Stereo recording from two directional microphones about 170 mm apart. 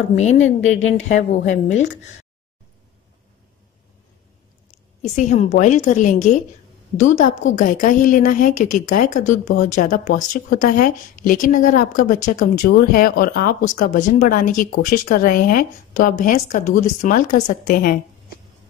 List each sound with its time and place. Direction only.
0.2 s speech: 40° left (ahead or behind)
5.0 s a woman's voice: 40° left (ahead or behind); by 17.9 s 60° left (ahead or behind)